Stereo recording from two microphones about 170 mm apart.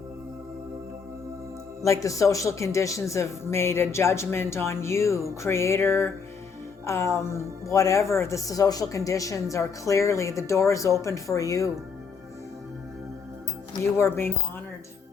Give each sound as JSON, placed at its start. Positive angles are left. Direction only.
{"t": 1.8, "sound": "speech", "side_deg": 20}
{"t": 13.9, "sound": "speech", "side_deg": 15}